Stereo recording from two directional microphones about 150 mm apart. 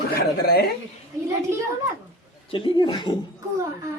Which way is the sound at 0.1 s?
90° left.